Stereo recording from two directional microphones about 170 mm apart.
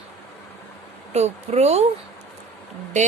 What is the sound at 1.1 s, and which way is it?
Speech, 40° right (ahead or behind).